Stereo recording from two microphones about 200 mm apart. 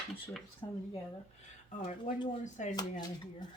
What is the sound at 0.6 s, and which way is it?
Speech, 20° left (ahead or behind).